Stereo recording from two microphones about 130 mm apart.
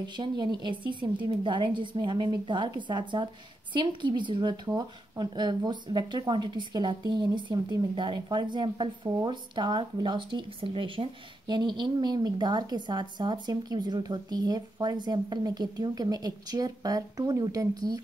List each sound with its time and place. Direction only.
0.0 s speech: 35° right (ahead or behind)